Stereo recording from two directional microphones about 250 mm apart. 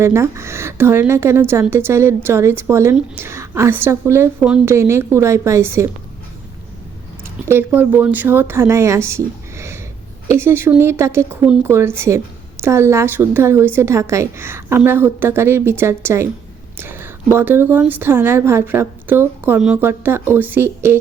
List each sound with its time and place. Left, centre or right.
0.0 s a woman's voice: centre
7.4 s a woman's voice: centre